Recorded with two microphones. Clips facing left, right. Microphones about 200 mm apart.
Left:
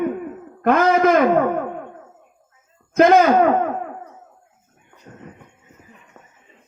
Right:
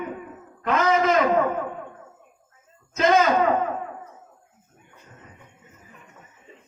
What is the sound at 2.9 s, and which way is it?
Speech, 55° left (ahead or behind).